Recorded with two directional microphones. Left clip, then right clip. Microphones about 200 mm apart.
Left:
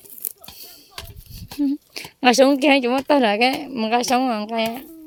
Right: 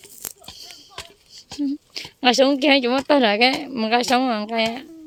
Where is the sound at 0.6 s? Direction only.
15° left (ahead or behind).